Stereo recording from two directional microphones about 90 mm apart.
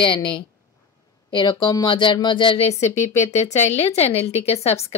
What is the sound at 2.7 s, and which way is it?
Speech, 40° left (ahead or behind).